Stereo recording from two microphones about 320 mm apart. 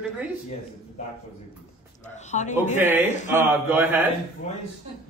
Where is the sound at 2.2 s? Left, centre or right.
Left.